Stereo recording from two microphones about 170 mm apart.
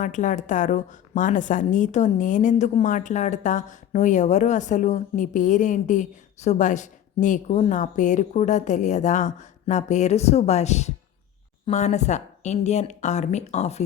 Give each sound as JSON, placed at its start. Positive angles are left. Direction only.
{"t": 0.0, "sound": "a woman's voice", "side_deg": 50}